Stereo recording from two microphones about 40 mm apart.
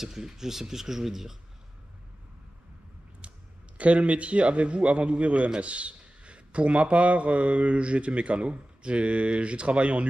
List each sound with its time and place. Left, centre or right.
0.0 s speech: centre
3.7 s a man's voice: right